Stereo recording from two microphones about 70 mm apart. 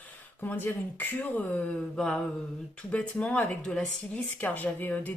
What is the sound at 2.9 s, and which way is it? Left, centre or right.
Speech, centre.